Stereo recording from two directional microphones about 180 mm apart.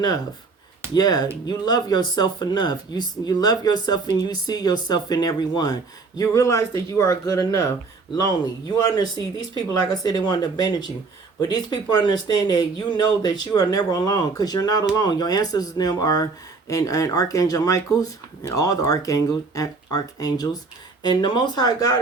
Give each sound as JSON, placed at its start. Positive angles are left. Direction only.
{"t": 0.9, "sound": "speech", "side_deg": 20}